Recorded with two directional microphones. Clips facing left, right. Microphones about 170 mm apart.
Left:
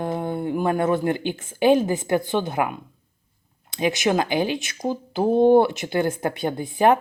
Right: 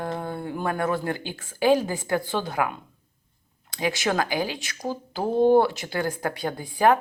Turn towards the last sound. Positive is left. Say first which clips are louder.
# left 2 dB
turn(degrees=20)  # may be behind; listen again after turning